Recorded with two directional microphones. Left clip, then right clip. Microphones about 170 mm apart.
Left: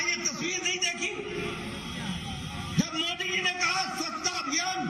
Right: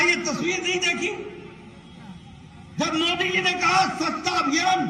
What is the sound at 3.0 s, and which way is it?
Speech, 45° right (ahead or behind).